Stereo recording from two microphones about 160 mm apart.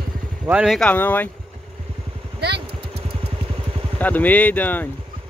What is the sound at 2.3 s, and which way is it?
Vehicle, 90° right.